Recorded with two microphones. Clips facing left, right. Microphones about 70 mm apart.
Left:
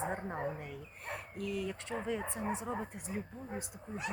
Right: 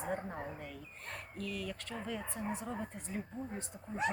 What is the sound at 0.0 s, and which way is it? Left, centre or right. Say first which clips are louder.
Speech: left 2 dB; left.